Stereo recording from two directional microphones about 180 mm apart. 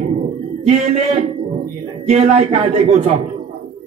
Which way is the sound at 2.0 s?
35° right (ahead or behind).